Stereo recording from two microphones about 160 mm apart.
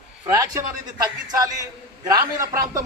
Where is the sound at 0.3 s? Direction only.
20° right (ahead or behind).